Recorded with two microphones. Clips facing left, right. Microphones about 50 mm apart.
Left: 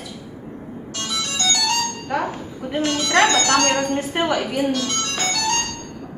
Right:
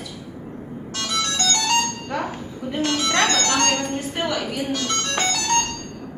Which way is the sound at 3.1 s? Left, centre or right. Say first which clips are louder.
Left 6 dB; left.